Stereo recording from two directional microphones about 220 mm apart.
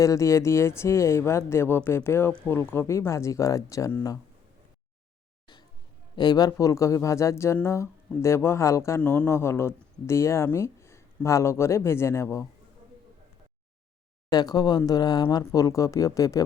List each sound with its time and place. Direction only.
0.0 s speech: 15° left (ahead or behind)
6.1 s speech: 20° left (ahead or behind)
14.3 s speech: 15° left (ahead or behind)